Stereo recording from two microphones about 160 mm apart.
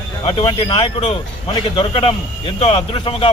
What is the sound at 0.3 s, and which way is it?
A man's voice, 35° left (ahead or behind).